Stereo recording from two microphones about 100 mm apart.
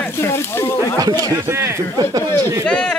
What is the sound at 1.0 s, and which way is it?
Speech, 40° right (ahead or behind).